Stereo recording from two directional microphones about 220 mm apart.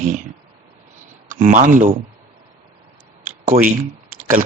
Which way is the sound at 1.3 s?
35° right (ahead or behind).